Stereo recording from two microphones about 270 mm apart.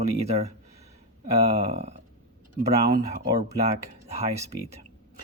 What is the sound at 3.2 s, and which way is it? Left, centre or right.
Speech, right.